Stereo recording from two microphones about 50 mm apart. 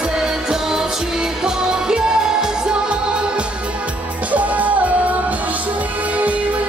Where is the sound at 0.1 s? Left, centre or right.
Centre.